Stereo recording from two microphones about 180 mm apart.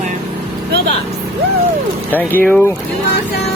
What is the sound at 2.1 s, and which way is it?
Speech, 10° left (ahead or behind).